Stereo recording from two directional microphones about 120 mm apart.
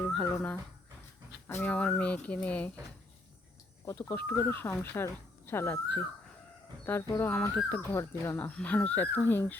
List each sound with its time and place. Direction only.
0.0 s speech: 5° left (ahead or behind)
3.9 s speech: 15° left (ahead or behind)